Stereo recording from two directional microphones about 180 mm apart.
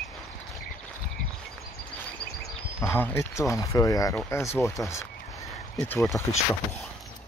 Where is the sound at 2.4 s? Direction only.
10° left (ahead or behind).